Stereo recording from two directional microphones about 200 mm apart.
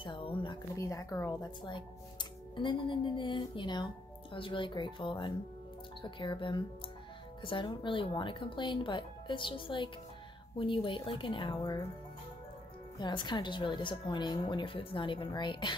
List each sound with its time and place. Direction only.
0.0 s speech: 25° left (ahead or behind)
13.0 s speech: 20° left (ahead or behind)